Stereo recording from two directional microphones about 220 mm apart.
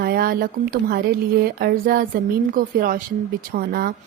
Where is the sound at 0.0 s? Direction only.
45° right (ahead or behind).